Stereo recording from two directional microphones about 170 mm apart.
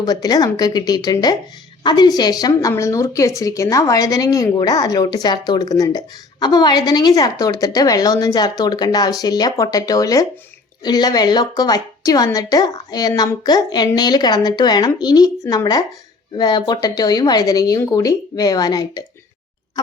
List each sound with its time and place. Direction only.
0.0 s a woman's voice: 20° left (ahead or behind)